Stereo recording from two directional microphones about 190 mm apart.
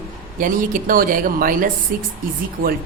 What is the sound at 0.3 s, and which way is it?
Speech, 45° right (ahead or behind).